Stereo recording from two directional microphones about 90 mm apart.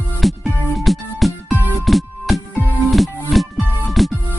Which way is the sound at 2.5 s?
20° left (ahead or behind).